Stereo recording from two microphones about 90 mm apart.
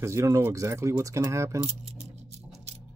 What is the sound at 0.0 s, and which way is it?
Speech, 35° right (ahead or behind).